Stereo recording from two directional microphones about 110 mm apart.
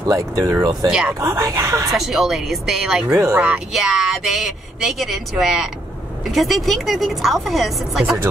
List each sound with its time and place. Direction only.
0.0 s speech: 30° right (ahead or behind)
0.8 s speech: 10° right (ahead or behind)
1.2 s speech: 30° right (ahead or behind)
2.0 s speech: 5° right (ahead or behind)